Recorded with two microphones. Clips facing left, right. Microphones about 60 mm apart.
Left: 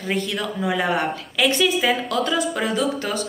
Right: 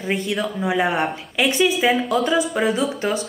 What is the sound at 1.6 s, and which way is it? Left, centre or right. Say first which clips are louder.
Speech: right 2 dB; centre.